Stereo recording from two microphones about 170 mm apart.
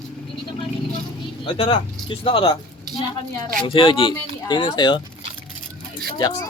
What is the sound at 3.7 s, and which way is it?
Speech, 30° left (ahead or behind).